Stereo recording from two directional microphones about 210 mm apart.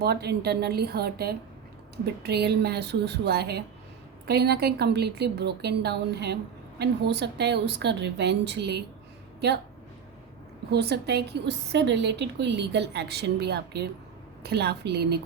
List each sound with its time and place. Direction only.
0.0 s a woman's voice: 50° right (ahead or behind)
10.7 s a woman's voice: 50° right (ahead or behind)